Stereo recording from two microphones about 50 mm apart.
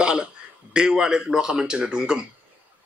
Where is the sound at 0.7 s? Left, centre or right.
Centre.